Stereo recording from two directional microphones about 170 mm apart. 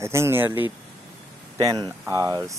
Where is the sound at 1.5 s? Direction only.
25° right (ahead or behind).